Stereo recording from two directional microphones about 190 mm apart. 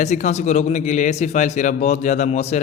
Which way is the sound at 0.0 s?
40° left (ahead or behind).